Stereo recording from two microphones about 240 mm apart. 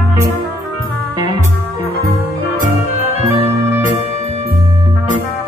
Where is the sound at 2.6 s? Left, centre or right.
Right.